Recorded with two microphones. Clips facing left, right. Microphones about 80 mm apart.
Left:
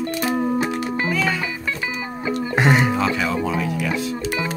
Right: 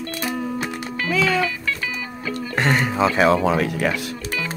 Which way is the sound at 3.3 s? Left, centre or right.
Right.